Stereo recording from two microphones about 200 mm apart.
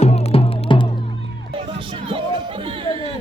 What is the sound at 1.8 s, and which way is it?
Music, 25° right (ahead or behind).